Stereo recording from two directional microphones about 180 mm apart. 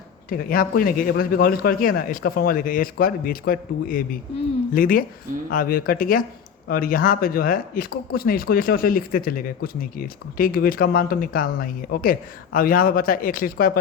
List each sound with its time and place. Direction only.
0.3 s speech: 55° left (ahead or behind)